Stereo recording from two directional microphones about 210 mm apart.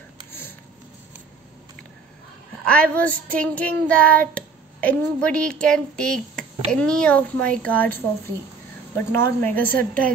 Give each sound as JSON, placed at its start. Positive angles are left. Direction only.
{"t": 0.3, "sound": "a sound", "side_deg": 10}
{"t": 2.6, "sound": "child singing", "side_deg": 5}
{"t": 8.9, "sound": "a woman's voice", "side_deg": 10}